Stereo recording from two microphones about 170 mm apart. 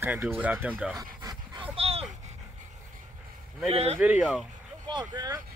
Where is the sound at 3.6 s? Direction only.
35° right (ahead or behind).